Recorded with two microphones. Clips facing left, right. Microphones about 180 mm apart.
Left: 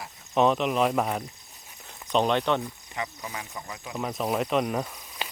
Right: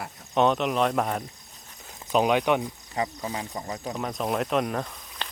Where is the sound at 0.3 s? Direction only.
Centre (ahead or behind).